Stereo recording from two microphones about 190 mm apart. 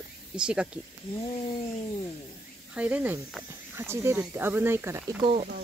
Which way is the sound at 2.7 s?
10° right (ahead or behind).